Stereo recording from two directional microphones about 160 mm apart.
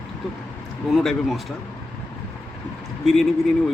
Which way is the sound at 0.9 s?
Centre (ahead or behind).